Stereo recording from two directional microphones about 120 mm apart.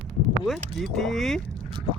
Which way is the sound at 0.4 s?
Centre (ahead or behind).